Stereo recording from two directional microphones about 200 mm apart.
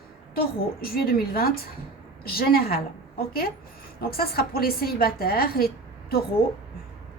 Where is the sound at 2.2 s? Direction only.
50° left (ahead or behind).